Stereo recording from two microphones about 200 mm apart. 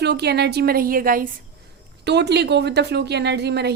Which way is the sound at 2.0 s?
55° right (ahead or behind).